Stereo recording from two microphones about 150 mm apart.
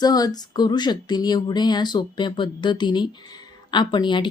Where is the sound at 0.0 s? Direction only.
25° left (ahead or behind).